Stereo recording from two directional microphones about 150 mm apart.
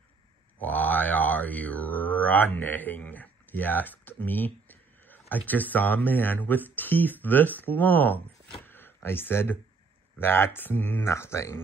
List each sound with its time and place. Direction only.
0.6 s mantra: 10° left (ahead or behind)
5.5 s speech: 10° left (ahead or behind)
8.5 s a sound: 15° left (ahead or behind)
10.1 s speech: 15° left (ahead or behind)